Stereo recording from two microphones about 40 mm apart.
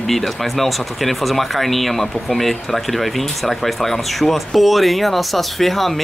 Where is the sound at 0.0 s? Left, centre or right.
Centre.